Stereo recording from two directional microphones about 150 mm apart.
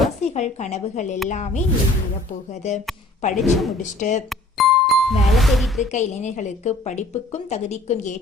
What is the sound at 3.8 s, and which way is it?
Speech, 55° left (ahead or behind).